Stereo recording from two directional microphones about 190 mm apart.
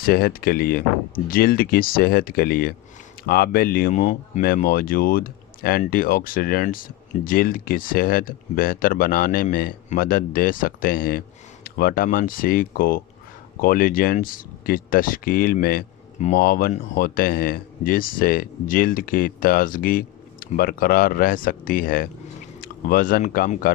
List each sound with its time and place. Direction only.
0.0 s speech: 55° left (ahead or behind)
4.4 s speech: 50° left (ahead or behind)